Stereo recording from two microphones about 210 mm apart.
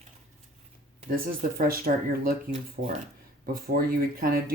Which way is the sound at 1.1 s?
45° right (ahead or behind).